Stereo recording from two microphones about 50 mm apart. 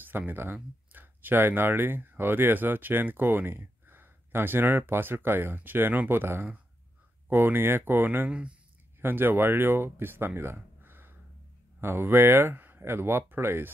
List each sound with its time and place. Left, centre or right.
0.0 s speech: right
8.3 s speech: right
9.0 s speech: right
12.5 s a sound: right
12.8 s speech: right